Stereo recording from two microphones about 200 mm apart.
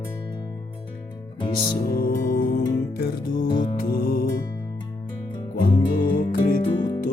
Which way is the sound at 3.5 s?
25° left (ahead or behind).